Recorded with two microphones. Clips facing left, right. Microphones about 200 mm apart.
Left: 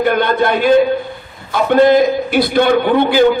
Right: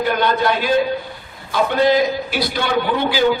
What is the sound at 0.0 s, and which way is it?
A man's voice, 55° left (ahead or behind).